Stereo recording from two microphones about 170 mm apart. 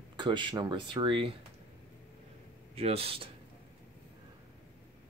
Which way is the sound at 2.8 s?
35° right (ahead or behind).